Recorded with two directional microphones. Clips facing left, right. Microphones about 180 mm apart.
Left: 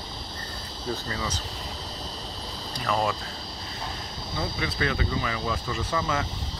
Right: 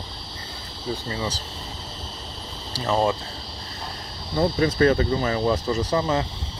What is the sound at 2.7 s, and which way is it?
Speech, 30° right (ahead or behind).